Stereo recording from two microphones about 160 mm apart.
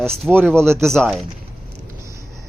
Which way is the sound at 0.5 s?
15° right (ahead or behind).